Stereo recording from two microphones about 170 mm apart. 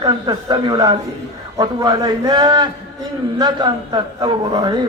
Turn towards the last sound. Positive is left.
turn(degrees=-25)  # may be behind; listen again after turning